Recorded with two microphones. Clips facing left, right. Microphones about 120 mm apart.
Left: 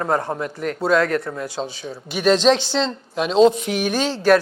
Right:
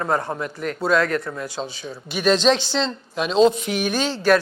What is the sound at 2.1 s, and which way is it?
A woman's voice, 60° left (ahead or behind).